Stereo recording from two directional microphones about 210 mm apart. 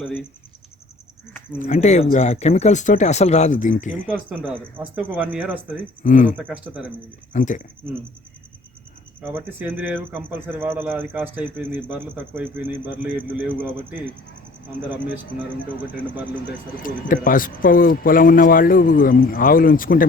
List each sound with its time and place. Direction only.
1.5 s speech: 35° left (ahead or behind)
4.0 s speech: 5° right (ahead or behind)
6.0 s speech: 35° left (ahead or behind)
6.2 s speech: 5° right (ahead or behind)
7.3 s speech: 35° left (ahead or behind)
9.2 s speech: 10° right (ahead or behind)
16.8 s speech: 40° left (ahead or behind)